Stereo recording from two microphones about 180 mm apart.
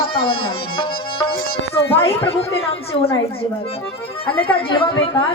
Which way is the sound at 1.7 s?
35° left (ahead or behind).